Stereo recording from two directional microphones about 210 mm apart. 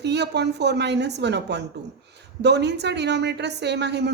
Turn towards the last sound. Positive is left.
turn(degrees=-55)  # may be behind; listen again after turning